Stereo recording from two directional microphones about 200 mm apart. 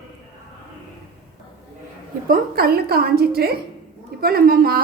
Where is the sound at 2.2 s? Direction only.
45° right (ahead or behind).